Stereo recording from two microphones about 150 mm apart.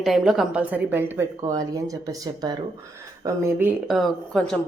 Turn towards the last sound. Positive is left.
turn(degrees=5)  # may be behind; listen again after turning